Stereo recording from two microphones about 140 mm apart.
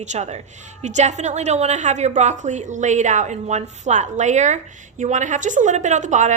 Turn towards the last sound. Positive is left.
turn(degrees=-60)  # may be behind; listen again after turning